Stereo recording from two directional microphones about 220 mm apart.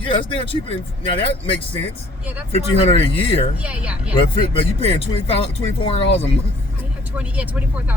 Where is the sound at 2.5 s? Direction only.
25° left (ahead or behind).